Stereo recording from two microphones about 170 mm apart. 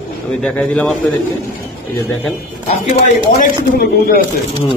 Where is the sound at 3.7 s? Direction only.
65° left (ahead or behind).